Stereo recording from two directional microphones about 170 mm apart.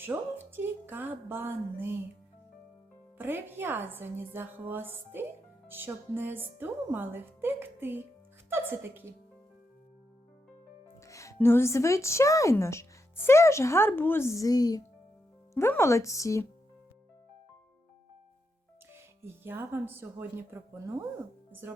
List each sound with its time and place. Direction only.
0.0 s a woman's voice: 10° right (ahead or behind)
3.2 s a woman's voice: 10° right (ahead or behind)
11.0 s speech: 15° left (ahead or behind)
18.9 s a woman's voice: 15° right (ahead or behind)